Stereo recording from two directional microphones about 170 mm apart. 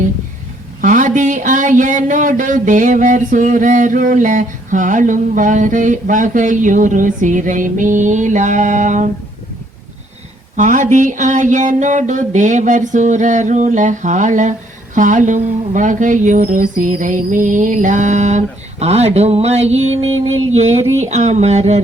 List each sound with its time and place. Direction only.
0.8 s speech: 50° right (ahead or behind)
10.6 s speech: 45° right (ahead or behind)
20.6 s a sound: 40° right (ahead or behind)